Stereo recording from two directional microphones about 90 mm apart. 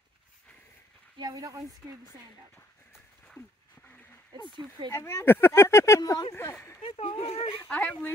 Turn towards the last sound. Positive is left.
turn(degrees=15)  # may be behind; listen again after turning